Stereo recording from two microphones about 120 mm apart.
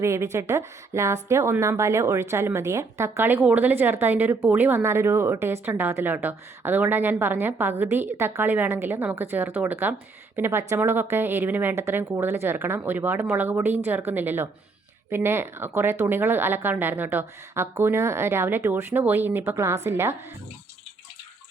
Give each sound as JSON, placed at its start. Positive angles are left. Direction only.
{"t": 0.0, "sound": "a woman's voice", "side_deg": -25}